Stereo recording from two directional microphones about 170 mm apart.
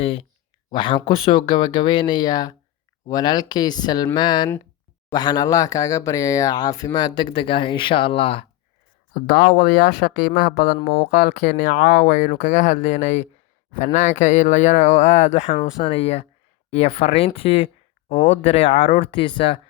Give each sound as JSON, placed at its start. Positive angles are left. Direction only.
{"t": 0.0, "sound": "speech", "side_deg": 35}
{"t": 9.1, "sound": "speech", "side_deg": 65}